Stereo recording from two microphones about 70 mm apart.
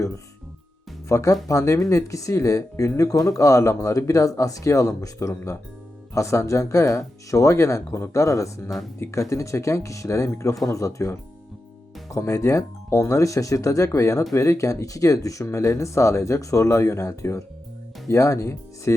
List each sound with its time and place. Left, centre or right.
1.0 s speech: left
6.1 s speech: left